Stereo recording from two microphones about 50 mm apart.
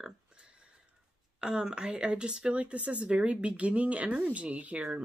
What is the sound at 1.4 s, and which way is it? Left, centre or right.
Speech, centre.